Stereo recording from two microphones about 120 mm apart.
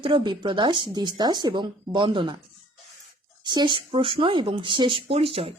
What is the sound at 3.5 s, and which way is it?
Speech, 40° right (ahead or behind).